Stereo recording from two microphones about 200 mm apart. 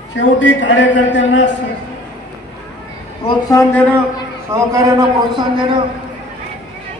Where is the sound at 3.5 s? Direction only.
15° left (ahead or behind).